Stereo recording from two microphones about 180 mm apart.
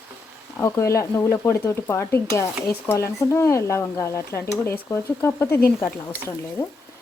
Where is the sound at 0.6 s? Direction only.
15° left (ahead or behind).